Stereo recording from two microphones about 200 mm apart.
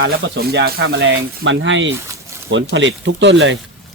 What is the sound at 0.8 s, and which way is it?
Speech, 60° right (ahead or behind).